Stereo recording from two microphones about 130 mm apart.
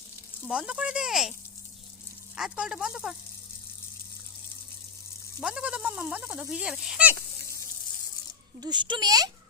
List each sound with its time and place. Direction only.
0.4 s speech: 5° right (ahead or behind)
2.3 s speech: 5° right (ahead or behind)
5.4 s speech: 5° right (ahead or behind)
8.6 s a child's voice: 35° right (ahead or behind)